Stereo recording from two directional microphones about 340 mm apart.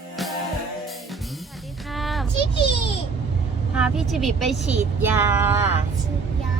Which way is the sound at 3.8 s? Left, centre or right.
Centre.